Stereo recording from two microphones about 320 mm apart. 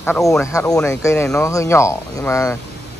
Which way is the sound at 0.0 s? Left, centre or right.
Centre.